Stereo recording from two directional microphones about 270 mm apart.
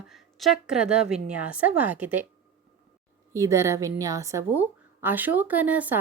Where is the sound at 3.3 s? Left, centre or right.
Centre.